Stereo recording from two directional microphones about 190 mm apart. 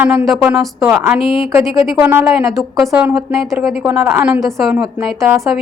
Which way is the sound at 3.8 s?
10° right (ahead or behind).